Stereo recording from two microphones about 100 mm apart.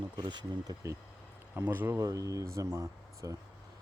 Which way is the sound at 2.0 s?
35° right (ahead or behind).